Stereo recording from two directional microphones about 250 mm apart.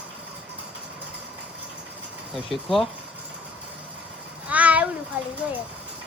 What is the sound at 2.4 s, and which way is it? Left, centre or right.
Speech, centre.